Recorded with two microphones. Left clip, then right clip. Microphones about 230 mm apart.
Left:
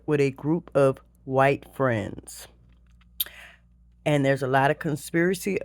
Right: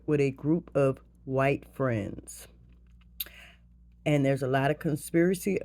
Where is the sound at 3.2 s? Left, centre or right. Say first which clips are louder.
Left 7 dB; left.